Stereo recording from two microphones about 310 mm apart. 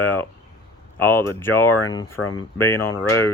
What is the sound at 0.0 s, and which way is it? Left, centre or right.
Speech, centre.